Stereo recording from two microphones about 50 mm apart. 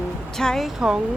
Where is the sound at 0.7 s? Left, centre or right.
Centre.